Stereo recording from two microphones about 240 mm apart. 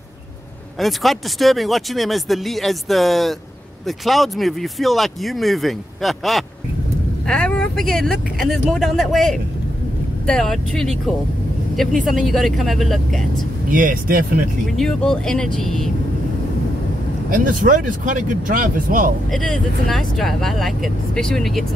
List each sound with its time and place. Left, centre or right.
0.7 s speech: centre
13.7 s speech: right
14.8 s speech: centre
17.3 s speech: right
19.3 s speech: centre